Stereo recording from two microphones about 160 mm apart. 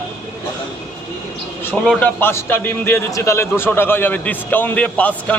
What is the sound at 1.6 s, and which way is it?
A man's voice, 10° left (ahead or behind).